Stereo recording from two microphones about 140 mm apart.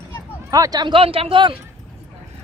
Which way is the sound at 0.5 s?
25° right (ahead or behind).